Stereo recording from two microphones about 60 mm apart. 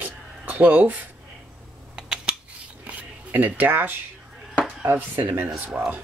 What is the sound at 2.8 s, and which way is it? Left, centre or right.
Zipper, right.